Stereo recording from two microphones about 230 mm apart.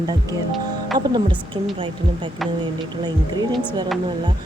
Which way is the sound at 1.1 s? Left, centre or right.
Right.